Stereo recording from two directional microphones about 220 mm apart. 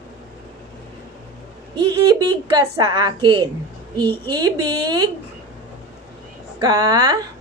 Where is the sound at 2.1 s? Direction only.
20° right (ahead or behind).